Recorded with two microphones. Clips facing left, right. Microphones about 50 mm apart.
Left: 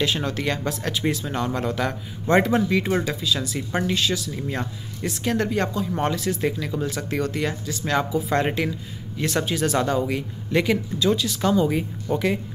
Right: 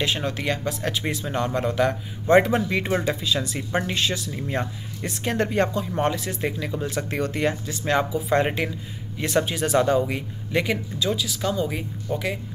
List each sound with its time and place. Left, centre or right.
0.0 s speech: centre
1.4 s speech: right; by 11.8 s centre
12.1 s speech: centre